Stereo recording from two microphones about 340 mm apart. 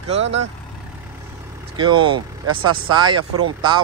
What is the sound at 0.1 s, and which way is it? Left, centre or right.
Speech, centre.